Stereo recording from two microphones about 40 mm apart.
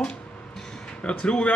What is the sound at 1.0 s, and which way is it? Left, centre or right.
Speech, left.